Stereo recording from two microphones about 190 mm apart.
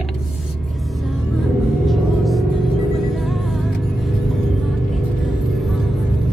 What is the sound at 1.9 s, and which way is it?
Vehicle, centre (ahead or behind).